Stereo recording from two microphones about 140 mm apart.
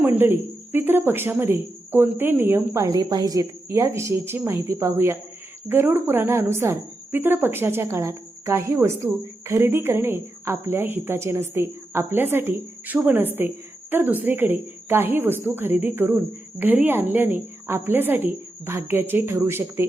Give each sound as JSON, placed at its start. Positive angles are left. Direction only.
{"t": 0.0, "sound": "a woman's voice", "side_deg": -15}